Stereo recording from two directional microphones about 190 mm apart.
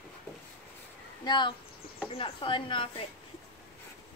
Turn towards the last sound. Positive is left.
turn(degrees=25)  # may be behind; listen again after turning